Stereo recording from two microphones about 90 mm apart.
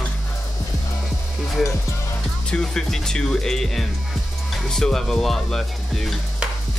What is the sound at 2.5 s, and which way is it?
Speech, 5° left (ahead or behind).